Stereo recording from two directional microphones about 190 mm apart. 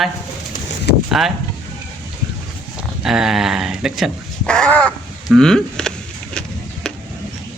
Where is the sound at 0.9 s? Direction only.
60° left (ahead or behind).